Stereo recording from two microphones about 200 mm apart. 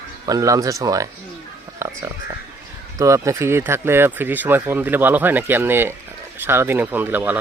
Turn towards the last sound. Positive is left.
turn(degrees=-10)  # may be behind; listen again after turning